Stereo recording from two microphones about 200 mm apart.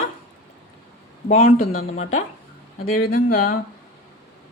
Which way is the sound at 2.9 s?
45° left (ahead or behind).